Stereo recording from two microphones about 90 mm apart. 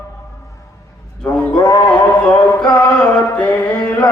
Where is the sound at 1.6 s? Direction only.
50° left (ahead or behind).